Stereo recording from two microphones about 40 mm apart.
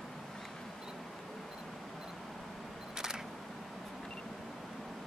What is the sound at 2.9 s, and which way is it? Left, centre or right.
Single-lens reflex camera, centre.